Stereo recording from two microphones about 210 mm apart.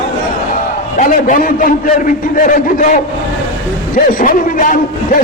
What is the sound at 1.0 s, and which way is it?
Speech, 35° left (ahead or behind).